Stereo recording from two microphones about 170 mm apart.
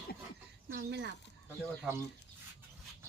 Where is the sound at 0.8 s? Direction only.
85° right.